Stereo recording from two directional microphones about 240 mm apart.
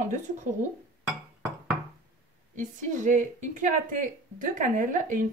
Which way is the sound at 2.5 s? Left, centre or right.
Right.